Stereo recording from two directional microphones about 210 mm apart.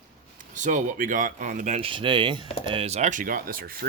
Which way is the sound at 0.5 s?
35° right (ahead or behind).